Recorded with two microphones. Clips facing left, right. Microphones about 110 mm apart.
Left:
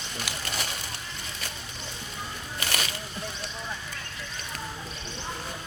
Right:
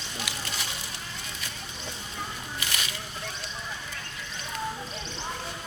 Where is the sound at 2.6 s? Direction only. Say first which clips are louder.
Left 4 dB; 50° left (ahead or behind).